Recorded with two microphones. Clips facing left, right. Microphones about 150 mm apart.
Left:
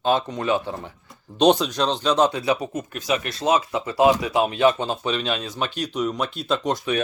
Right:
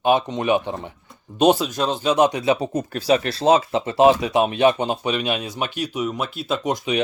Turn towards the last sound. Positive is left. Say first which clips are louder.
# right 1 dB
turn(degrees=-15)  # may be behind; listen again after turning